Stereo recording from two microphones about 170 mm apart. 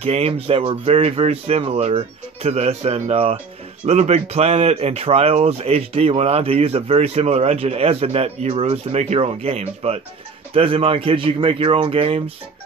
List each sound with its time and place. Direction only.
0.0 s speech: 35° right (ahead or behind)